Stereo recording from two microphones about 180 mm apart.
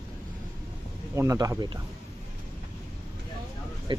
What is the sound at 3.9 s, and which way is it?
Speech, 25° right (ahead or behind).